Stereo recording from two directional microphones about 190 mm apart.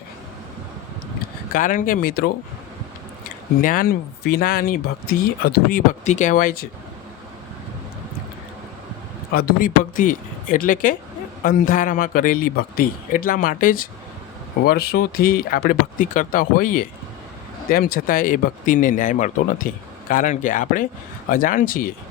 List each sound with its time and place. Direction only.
1.5 s speech: 45° left (ahead or behind)
3.6 s speech: 45° left (ahead or behind)
9.3 s speech: 50° left (ahead or behind)